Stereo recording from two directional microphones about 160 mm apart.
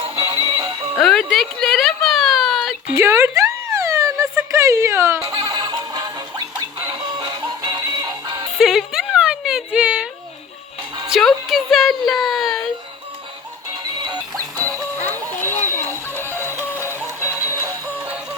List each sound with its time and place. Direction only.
0.0 s music: 35° right (ahead or behind)
0.9 s music: centre (ahead or behind)
2.9 s a sound: 15° right (ahead or behind)
5.2 s music: 30° right (ahead or behind)
8.5 s a sound: centre (ahead or behind)
11.1 s a sound: centre (ahead or behind)
14.0 s music: 25° right (ahead or behind)
15.0 s music: 10° left (ahead or behind)
16.4 s music: 15° right (ahead or behind)